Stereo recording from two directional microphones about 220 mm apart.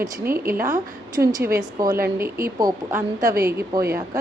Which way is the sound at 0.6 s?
15° right (ahead or behind).